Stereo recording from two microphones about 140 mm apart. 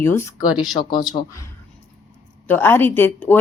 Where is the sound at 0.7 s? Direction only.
30° left (ahead or behind).